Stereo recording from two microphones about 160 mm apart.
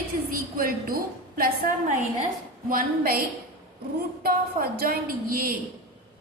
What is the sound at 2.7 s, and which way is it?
Speech, 65° right (ahead or behind).